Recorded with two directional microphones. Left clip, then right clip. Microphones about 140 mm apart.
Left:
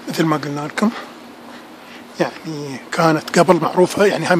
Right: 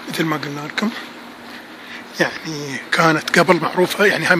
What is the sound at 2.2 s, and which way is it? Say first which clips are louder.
Speech: right 1 dB; 15° left (ahead or behind).